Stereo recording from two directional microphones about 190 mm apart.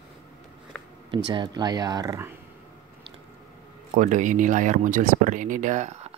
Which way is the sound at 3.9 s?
40° right (ahead or behind).